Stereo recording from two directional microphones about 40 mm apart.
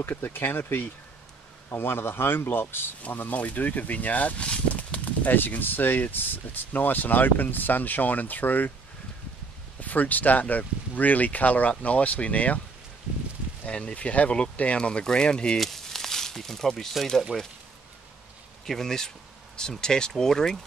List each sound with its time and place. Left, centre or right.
0.0 s speech: left
1.7 s speech: left
3.1 s speech: left
3.3 s speech: left
9.8 s speech: left
13.7 s speech: left
15.6 s a sound: centre
17.3 s speech: centre
18.7 s speech: centre